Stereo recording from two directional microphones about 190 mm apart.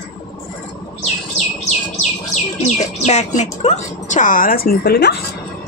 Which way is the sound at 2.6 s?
35° left (ahead or behind).